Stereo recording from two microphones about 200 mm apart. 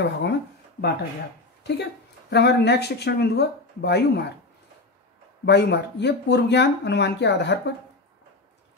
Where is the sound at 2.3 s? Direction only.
55° left (ahead or behind).